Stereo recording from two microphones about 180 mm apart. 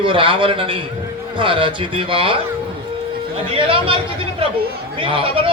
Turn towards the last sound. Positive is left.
turn(degrees=-30)  # may be behind; listen again after turning